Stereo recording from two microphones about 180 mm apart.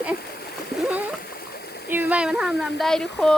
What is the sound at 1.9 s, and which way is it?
Speech, 10° right (ahead or behind).